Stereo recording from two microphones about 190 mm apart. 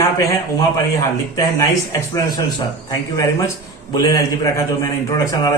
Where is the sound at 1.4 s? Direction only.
15° left (ahead or behind).